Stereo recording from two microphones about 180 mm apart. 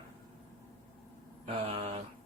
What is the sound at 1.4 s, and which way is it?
Speech, 30° right (ahead or behind).